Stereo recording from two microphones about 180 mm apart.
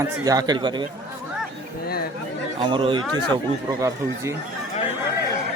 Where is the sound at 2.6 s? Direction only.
30° right (ahead or behind).